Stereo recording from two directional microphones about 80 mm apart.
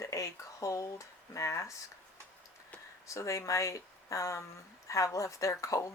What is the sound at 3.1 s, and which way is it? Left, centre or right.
Speech, left.